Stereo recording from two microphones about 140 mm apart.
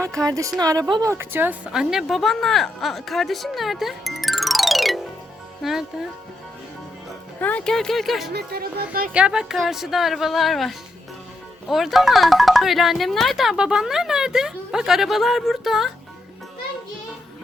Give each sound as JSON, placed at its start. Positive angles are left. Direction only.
{"t": 0.0, "sound": "a woman's voice", "side_deg": 5}
{"t": 0.3, "sound": "speech", "side_deg": -25}
{"t": 1.1, "sound": "a woman's voice", "side_deg": -15}
{"t": 7.3, "sound": "speech", "side_deg": 10}
{"t": 8.5, "sound": "speech", "side_deg": -90}
{"t": 9.1, "sound": "speech", "side_deg": -5}